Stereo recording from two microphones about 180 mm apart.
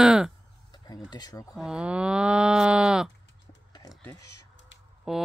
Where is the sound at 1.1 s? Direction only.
20° left (ahead or behind).